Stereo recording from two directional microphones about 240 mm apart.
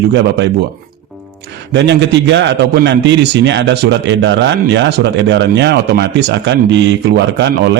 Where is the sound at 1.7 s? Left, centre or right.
Right.